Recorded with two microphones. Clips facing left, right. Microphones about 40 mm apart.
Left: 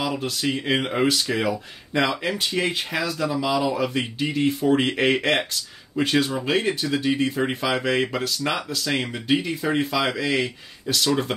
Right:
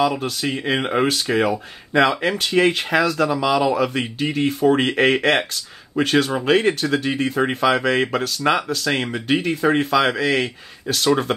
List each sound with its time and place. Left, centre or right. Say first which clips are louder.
0.0 s speech: right 5 dB; right
1.0 s speech: right 3 dB; right
10.4 s speech: right 2 dB; right